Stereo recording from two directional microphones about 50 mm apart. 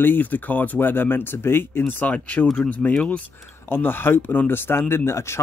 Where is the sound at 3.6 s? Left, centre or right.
Left.